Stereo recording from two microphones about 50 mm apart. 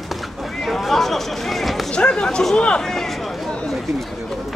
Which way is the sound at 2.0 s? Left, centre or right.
Centre.